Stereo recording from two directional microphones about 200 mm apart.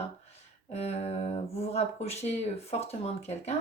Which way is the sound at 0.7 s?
30° left (ahead or behind).